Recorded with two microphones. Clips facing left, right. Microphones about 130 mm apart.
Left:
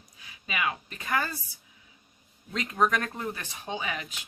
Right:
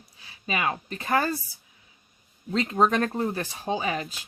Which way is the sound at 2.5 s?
30° right (ahead or behind).